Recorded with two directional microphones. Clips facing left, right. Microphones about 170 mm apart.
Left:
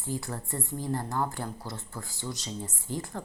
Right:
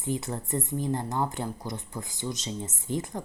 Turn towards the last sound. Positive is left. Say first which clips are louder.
# right 4 dB
turn(degrees=-20)  # may be behind; listen again after turning